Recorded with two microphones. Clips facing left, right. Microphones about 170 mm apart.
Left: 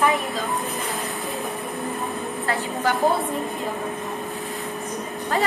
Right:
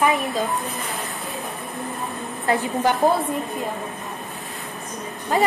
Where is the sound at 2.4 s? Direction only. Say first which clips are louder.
Right 5 dB; 20° right (ahead or behind).